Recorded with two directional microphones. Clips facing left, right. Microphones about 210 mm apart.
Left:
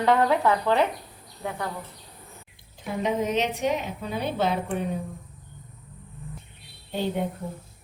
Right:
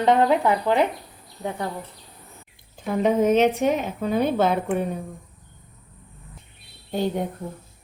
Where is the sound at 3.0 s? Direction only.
50° right (ahead or behind).